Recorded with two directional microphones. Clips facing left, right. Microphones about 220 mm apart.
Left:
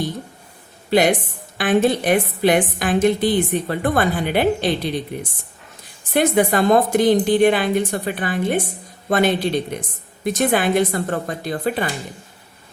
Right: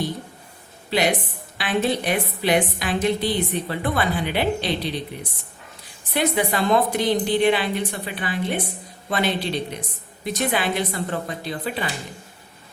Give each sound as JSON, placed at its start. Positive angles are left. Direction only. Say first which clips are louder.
{"t": 0.9, "sound": "a woman's voice", "louder": "left 5 dB", "side_deg": 45}
{"t": 6.1, "sound": "a woman's voice", "louder": "left 5 dB", "side_deg": 45}